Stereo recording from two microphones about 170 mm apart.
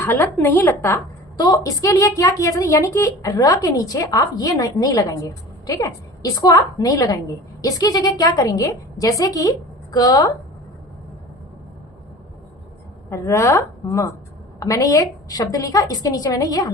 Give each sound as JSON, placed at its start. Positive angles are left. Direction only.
{"t": 0.0, "sound": "a woman's voice", "side_deg": 15}
{"t": 13.1, "sound": "a woman's voice", "side_deg": 15}